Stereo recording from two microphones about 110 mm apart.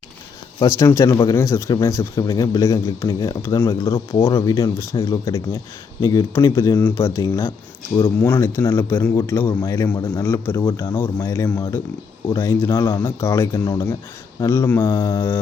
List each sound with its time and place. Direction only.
0.6 s speech: 25° left (ahead or behind)
2.1 s speech: 45° left (ahead or behind)
2.4 s a man's voice: 30° left (ahead or behind)